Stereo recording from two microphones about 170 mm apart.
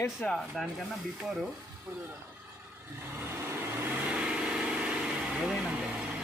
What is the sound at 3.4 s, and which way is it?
Vehicle, 10° right (ahead or behind).